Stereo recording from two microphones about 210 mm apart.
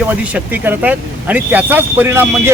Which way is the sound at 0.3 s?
10° right (ahead or behind).